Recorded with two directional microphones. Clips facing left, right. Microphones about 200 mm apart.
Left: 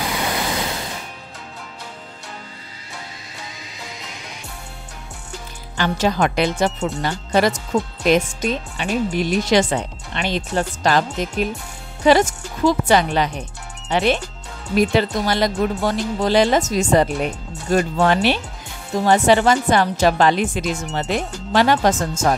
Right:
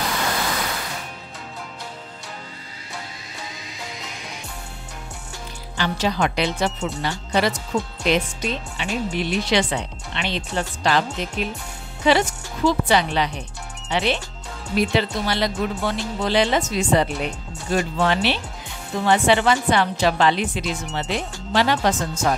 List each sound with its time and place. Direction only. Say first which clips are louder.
0.0 s vehicle: left 1 dB; 10° left (ahead or behind)
5.8 s a woman's voice: left 3 dB; 50° left (ahead or behind)